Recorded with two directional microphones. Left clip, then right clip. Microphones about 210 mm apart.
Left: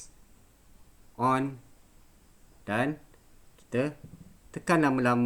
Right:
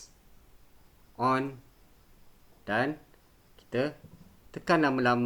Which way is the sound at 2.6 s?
55° left (ahead or behind).